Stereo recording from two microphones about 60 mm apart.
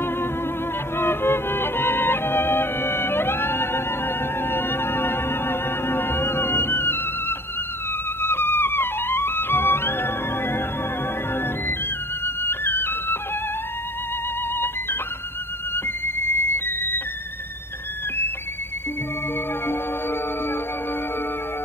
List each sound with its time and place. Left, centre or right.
0.9 s music: left
15.7 s music: left
19.6 s music: left